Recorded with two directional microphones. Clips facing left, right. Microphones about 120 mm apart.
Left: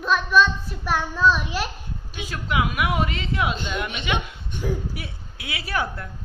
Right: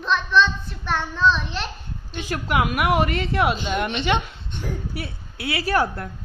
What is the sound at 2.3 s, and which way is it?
A woman's voice, 55° right (ahead or behind).